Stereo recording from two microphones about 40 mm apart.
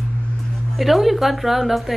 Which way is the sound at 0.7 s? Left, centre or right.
Centre.